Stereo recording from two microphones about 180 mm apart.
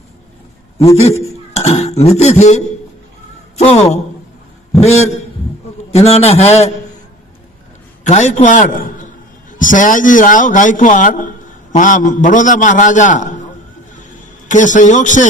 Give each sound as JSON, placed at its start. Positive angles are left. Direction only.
{"t": 0.8, "sound": "a man's voice", "side_deg": 35}
{"t": 1.2, "sound": "a sound", "side_deg": 35}
{"t": 3.6, "sound": "a man's voice", "side_deg": 35}
{"t": 8.0, "sound": "a man's voice", "side_deg": 40}
{"t": 14.4, "sound": "a man's voice", "side_deg": 45}